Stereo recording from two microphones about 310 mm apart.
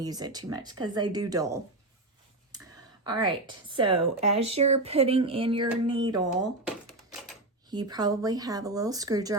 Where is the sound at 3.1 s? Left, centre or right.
Centre.